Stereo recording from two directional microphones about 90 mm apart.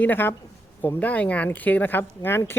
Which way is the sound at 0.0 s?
20° left (ahead or behind).